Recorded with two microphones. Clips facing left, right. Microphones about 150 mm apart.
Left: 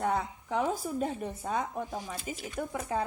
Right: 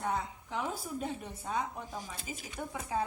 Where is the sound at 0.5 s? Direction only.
45° left (ahead or behind).